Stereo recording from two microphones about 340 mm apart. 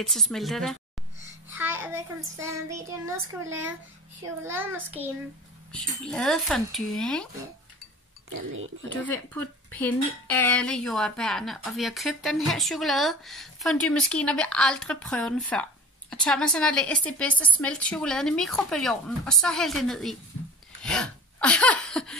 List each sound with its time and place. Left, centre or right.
0.0 s speech: centre
1.5 s child singing: centre
4.4 s speech: centre
8.3 s speech: right
8.8 s speech: centre
20.8 s a sound: centre